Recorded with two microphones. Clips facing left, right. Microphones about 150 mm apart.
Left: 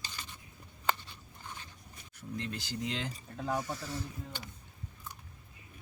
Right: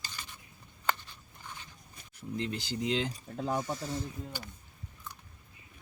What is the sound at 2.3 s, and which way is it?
Speech, 20° right (ahead or behind).